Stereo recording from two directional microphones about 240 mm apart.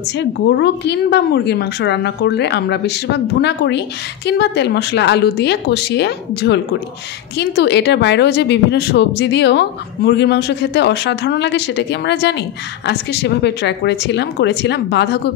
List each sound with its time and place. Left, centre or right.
0.2 s a woman's voice: left